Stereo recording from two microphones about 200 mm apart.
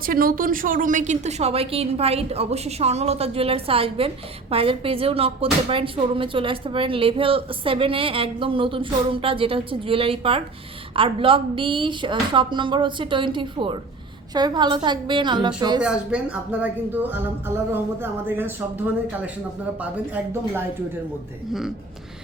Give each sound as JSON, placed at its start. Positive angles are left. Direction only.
{"t": 0.0, "sound": "a woman's voice", "side_deg": -45}
{"t": 15.8, "sound": "speech", "side_deg": -5}